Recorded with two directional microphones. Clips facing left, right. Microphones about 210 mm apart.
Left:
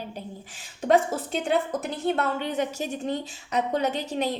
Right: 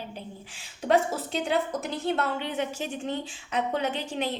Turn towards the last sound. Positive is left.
turn(degrees=40)  # may be behind; listen again after turning